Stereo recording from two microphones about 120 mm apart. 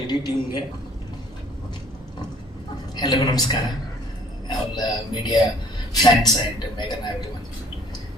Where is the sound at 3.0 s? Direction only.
35° left (ahead or behind).